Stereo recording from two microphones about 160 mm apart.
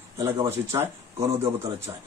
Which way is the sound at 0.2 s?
15° right (ahead or behind).